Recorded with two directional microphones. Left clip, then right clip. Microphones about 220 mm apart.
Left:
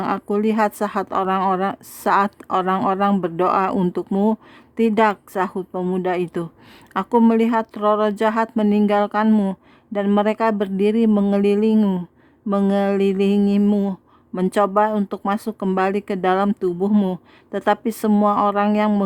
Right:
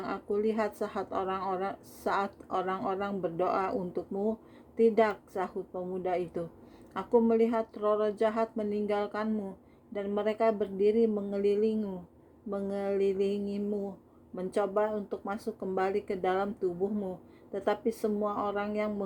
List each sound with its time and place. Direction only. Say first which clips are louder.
0.0 s speech: left 10 dB; 35° left (ahead or behind)